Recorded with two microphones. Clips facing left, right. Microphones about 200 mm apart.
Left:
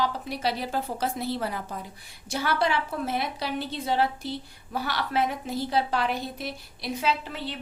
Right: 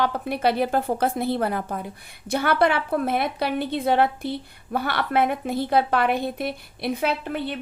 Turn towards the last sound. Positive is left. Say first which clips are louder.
# right 3 dB
turn(degrees=-55)  # may be behind; listen again after turning